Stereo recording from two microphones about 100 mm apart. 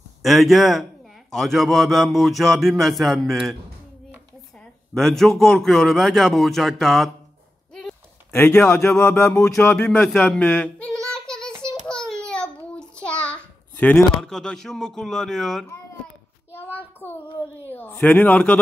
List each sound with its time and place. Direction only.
0.2 s a man's voice: centre (ahead or behind)
4.6 s a man's voice: 5° left (ahead or behind)
8.3 s speech: 25° left (ahead or behind)
8.6 s music: 20° left (ahead or behind)
9.8 s a man's voice: 5° left (ahead or behind)
11.1 s child singing: 5° left (ahead or behind)
16.5 s a sound: 20° left (ahead or behind)
17.6 s a man's voice: 20° left (ahead or behind)